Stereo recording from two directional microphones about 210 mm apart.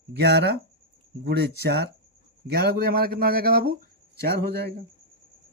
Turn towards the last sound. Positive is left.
turn(degrees=-50)  # may be behind; listen again after turning